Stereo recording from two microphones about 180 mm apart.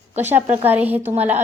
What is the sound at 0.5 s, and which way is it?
Speech, 10° right (ahead or behind).